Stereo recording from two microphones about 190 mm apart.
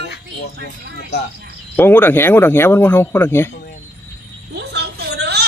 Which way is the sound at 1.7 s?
10° left (ahead or behind).